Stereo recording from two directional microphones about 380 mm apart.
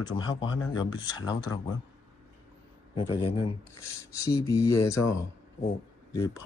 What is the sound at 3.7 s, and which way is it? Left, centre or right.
Speech, left.